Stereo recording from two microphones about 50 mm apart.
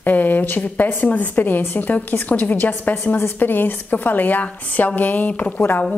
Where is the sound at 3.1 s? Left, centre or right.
Left.